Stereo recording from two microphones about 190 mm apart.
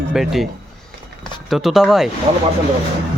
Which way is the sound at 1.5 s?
Centre (ahead or behind).